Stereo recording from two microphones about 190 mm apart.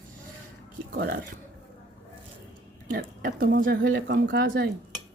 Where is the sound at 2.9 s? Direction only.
50° right (ahead or behind).